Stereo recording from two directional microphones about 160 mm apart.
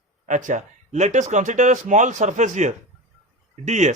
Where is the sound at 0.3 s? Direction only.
50° right (ahead or behind).